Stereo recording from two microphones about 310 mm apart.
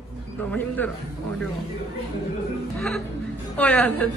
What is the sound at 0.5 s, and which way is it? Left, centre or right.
Speech, centre.